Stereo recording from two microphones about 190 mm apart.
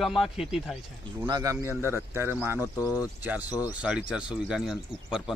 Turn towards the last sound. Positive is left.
turn(degrees=0)  # may be behind; listen again after turning